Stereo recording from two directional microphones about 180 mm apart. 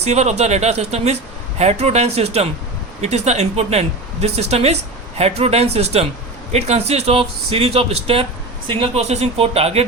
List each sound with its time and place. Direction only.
0.0 s speech: 40° right (ahead or behind)